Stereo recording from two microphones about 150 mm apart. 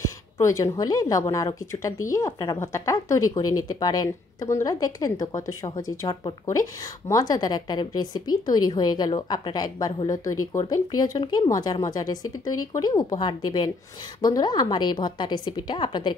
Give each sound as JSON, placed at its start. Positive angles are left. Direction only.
{"t": 0.0, "sound": "a woman's voice", "side_deg": 20}